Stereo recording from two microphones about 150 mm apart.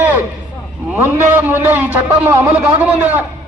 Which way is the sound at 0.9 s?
10° right (ahead or behind).